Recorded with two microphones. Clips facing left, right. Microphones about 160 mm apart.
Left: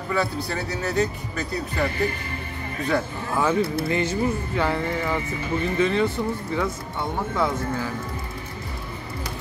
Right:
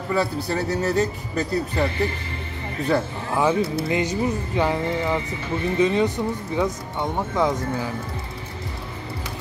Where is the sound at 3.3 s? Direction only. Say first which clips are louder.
Right 1 dB; 15° right (ahead or behind).